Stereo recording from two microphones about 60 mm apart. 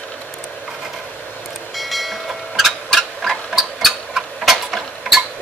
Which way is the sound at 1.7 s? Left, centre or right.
Centre.